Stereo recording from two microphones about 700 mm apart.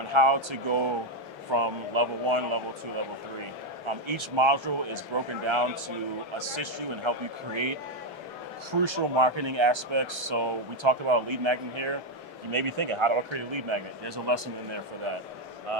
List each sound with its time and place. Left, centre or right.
0.1 s speech: right
3.8 s speech: right
8.8 s speech: right